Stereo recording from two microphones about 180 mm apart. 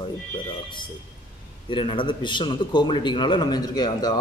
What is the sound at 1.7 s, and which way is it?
A man's voice, 30° left (ahead or behind).